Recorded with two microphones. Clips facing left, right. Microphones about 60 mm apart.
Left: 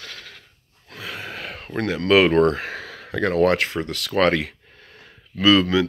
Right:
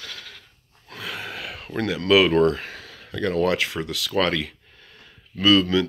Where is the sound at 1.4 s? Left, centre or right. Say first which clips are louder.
Left 1 dB; left.